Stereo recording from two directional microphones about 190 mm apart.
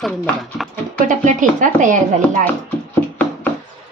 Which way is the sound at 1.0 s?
40° right (ahead or behind).